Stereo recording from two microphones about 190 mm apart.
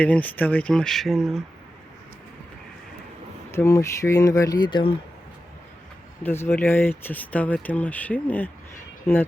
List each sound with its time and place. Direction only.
0.0 s speech: 10° left (ahead or behind)
3.5 s speech: 15° left (ahead or behind)
6.2 s speech: 10° left (ahead or behind)